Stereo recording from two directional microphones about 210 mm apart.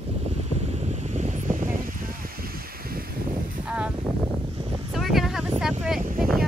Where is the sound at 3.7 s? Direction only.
5° right (ahead or behind).